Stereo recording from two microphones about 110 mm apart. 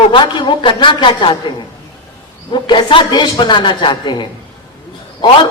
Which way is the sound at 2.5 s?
45° left (ahead or behind).